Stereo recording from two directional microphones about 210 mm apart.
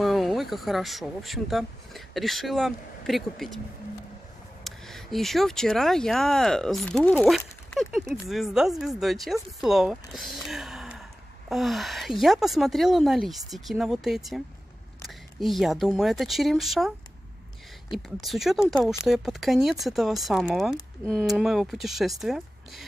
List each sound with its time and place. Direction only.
0.0 s speech: centre (ahead or behind)
4.6 s speech: centre (ahead or behind)
17.9 s speech: centre (ahead or behind)